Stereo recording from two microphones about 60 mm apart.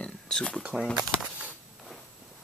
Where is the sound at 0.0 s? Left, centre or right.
Centre.